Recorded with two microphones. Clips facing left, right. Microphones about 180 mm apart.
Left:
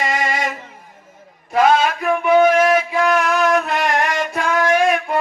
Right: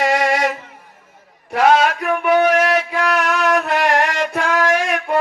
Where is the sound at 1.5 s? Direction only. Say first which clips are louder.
Right 1 dB; 75° right (ahead or behind).